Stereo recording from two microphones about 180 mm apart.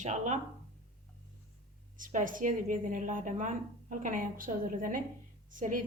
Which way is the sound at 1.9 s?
45° right (ahead or behind).